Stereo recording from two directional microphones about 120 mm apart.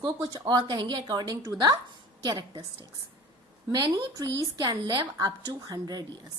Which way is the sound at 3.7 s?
35° right (ahead or behind).